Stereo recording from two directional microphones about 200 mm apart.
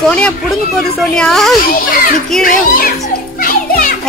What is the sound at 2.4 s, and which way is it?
Speech, 45° left (ahead or behind).